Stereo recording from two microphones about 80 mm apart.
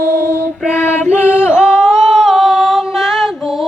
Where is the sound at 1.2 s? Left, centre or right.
Left.